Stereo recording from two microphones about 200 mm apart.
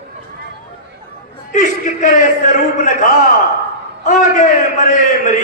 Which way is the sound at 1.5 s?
40° left (ahead or behind).